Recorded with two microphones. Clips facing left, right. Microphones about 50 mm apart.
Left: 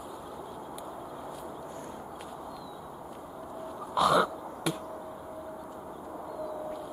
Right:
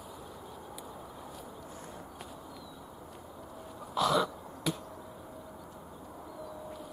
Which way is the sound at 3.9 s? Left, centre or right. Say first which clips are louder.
Left 4 dB; centre.